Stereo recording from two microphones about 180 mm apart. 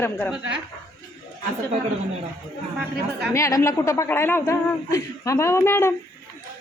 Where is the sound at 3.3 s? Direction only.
15° left (ahead or behind).